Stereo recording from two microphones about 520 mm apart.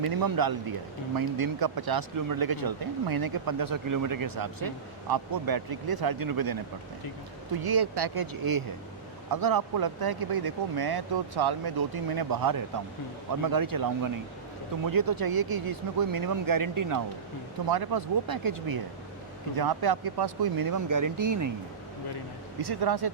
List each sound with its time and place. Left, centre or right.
0.0 s speech: right
7.6 s speech: right
22.6 s speech: right